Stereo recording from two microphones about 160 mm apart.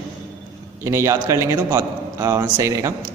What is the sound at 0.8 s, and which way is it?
A man's voice, 15° right (ahead or behind).